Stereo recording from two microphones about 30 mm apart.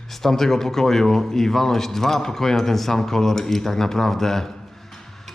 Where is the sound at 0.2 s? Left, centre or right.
Centre.